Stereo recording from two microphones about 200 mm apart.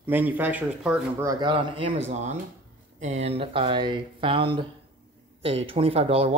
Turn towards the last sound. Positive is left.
turn(degrees=-30)  # may be behind; listen again after turning